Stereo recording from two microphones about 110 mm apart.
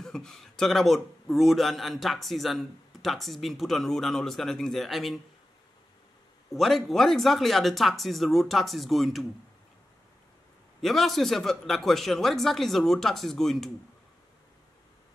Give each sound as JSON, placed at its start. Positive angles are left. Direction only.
{"t": 0.0, "sound": "a man's voice", "side_deg": 5}
{"t": 6.5, "sound": "a man's voice", "side_deg": 0}
{"t": 10.8, "sound": "a man's voice", "side_deg": 0}